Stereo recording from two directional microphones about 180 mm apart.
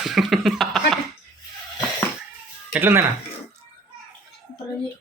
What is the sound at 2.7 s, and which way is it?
Speech, 10° right (ahead or behind).